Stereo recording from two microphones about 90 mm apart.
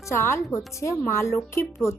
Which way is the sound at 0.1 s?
30° left (ahead or behind).